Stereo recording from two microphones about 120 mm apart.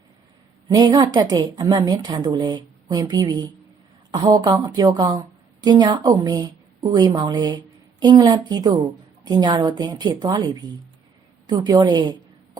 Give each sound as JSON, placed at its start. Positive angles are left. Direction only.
{"t": 0.7, "sound": "a woman's voice", "side_deg": -30}